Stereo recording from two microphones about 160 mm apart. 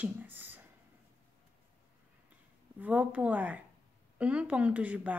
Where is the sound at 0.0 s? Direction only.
10° right (ahead or behind).